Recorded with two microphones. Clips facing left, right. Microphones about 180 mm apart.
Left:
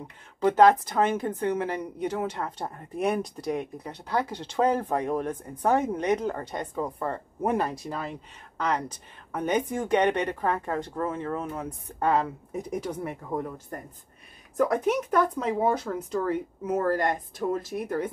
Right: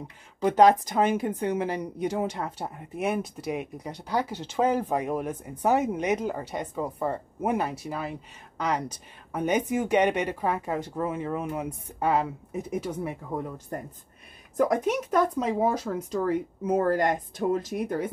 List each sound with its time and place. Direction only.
0.4 s a woman's voice: 15° right (ahead or behind)
15.3 s a woman's voice: 10° right (ahead or behind)
16.6 s speech: 20° right (ahead or behind)